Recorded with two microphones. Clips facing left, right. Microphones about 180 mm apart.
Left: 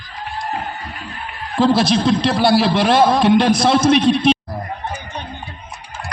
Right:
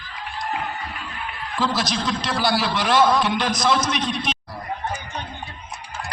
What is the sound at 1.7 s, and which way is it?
A man's voice, 25° left (ahead or behind).